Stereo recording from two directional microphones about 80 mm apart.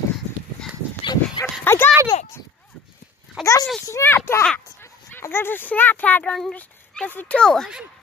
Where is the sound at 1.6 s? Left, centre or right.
Left.